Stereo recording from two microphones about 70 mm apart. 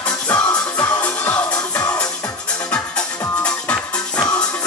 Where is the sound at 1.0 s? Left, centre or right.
Left.